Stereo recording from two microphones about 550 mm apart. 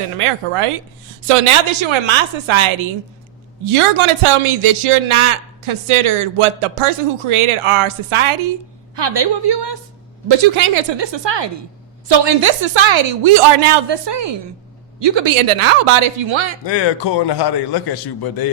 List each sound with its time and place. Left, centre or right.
0.2 s a man's voice: right
9.0 s a man's voice: right
16.6 s a man's voice: left